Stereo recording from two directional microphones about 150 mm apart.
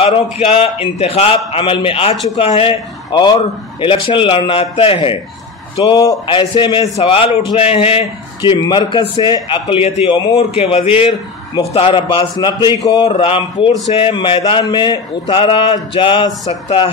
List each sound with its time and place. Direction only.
0.0 s a man's voice: 40° left (ahead or behind)
5.9 s speech: 20° left (ahead or behind)
6.2 s a man's voice: 35° left (ahead or behind)